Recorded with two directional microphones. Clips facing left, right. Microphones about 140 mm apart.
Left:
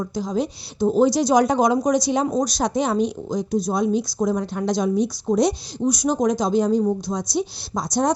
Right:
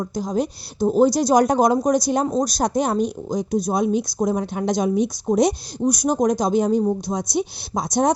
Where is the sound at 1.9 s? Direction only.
45° right (ahead or behind).